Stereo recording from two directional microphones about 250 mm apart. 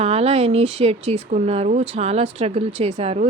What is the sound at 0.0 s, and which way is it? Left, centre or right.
Speech, right.